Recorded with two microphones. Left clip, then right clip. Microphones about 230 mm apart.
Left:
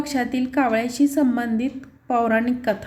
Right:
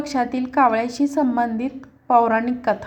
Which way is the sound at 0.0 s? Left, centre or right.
Centre.